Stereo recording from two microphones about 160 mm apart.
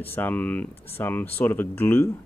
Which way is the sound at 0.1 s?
10° left (ahead or behind).